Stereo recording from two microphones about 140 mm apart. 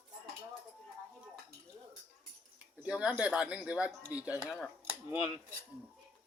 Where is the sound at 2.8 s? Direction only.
5° right (ahead or behind).